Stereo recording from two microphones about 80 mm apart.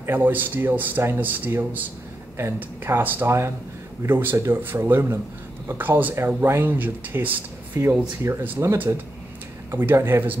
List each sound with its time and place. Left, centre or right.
0.0 s speech: right